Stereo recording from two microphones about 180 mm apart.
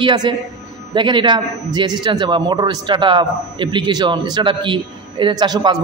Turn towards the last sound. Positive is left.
turn(degrees=-25)  # may be behind; listen again after turning